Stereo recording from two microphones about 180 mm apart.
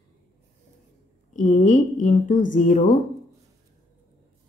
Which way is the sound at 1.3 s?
45° left (ahead or behind).